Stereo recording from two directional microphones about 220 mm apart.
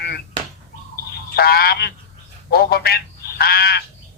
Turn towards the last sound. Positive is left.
turn(degrees=45)  # may be behind; listen again after turning